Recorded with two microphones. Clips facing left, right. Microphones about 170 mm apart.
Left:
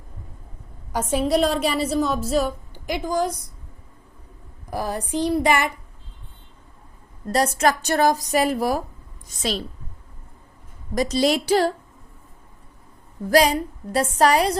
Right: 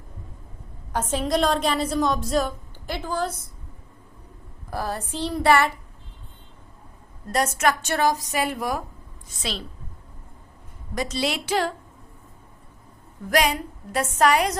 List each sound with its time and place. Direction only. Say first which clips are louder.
0.9 s a woman's voice: left 3 dB; 10° left (ahead or behind)
4.7 s a woman's voice: left 4 dB; 15° left (ahead or behind)
7.3 s a woman's voice: left 3 dB; 35° left (ahead or behind)
10.9 s a woman's voice: left 6 dB; 40° left (ahead or behind)
13.3 s a woman's voice: left 5 dB; 35° left (ahead or behind)